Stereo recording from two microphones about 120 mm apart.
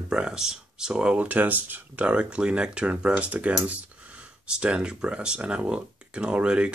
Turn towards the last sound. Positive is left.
turn(degrees=-10)  # may be behind; listen again after turning